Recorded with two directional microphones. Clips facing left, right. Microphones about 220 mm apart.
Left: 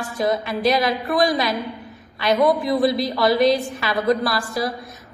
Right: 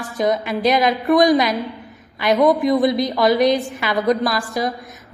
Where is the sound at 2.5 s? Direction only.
20° right (ahead or behind).